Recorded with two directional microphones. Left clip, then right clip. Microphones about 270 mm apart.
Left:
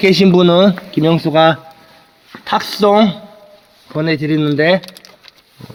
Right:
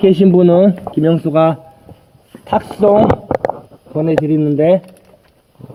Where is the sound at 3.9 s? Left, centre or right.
Left.